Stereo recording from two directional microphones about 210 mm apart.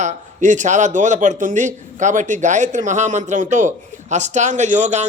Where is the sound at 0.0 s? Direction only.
35° right (ahead or behind).